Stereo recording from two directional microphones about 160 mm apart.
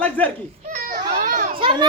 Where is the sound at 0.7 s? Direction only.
60° right (ahead or behind).